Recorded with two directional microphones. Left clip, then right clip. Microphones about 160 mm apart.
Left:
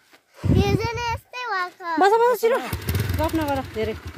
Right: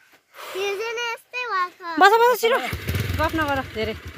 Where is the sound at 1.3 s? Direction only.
45° left (ahead or behind).